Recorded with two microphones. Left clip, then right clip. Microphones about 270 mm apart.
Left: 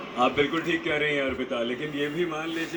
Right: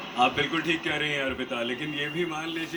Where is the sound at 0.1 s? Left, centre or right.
Right.